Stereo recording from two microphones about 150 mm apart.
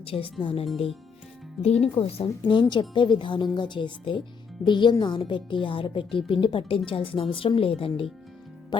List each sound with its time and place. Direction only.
0.0 s speech: 35° left (ahead or behind)
1.6 s speech: centre (ahead or behind)
2.0 s speech: 40° left (ahead or behind)